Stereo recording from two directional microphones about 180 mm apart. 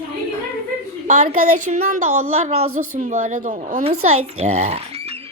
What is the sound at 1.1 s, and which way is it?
Speech, 40° right (ahead or behind).